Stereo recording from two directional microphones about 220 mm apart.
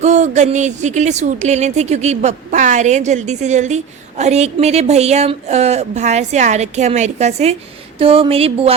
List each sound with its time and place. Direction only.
0.0 s speech: 30° right (ahead or behind)